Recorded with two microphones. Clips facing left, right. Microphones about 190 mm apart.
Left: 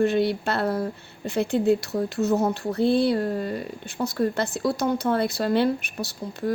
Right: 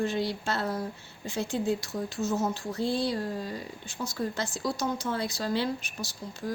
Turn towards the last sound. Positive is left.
turn(degrees=60)  # may be behind; listen again after turning